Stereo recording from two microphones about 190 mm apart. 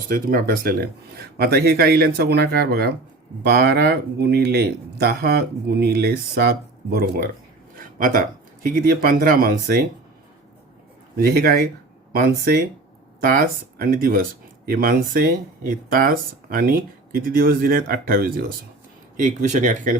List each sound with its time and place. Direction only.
0.1 s speech: 50° right (ahead or behind)
7.8 s a sound: 45° right (ahead or behind)
8.6 s speech: 45° right (ahead or behind)
11.2 s speech: 55° right (ahead or behind)
13.1 s speech: 50° right (ahead or behind)